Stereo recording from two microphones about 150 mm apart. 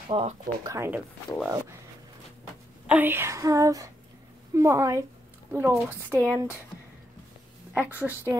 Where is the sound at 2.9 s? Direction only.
15° right (ahead or behind).